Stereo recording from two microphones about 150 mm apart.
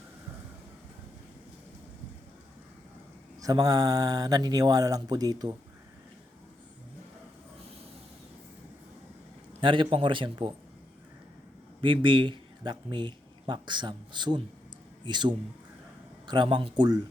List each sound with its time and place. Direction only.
3.4 s speech: 25° right (ahead or behind)
9.6 s a man's voice: 35° right (ahead or behind)
11.8 s a man's voice: 35° right (ahead or behind)